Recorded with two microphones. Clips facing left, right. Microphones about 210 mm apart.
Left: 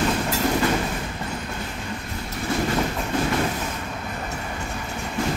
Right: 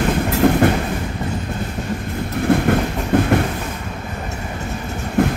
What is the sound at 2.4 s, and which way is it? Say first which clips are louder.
Train: right 7 dB; 60° right (ahead or behind).